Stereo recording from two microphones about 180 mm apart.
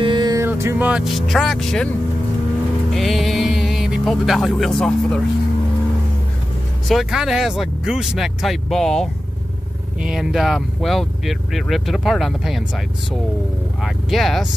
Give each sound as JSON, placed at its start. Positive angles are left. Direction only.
{"t": 0.0, "sound": "a sound", "side_deg": -25}
{"t": 0.5, "sound": "speech", "side_deg": -10}
{"t": 2.9, "sound": "speech", "side_deg": 0}
{"t": 6.9, "sound": "speech", "side_deg": -5}